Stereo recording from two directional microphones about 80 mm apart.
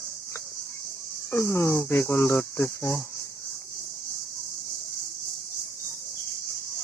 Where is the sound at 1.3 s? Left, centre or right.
Left.